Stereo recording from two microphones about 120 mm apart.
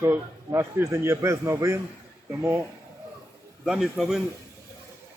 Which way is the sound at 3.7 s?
Centre (ahead or behind).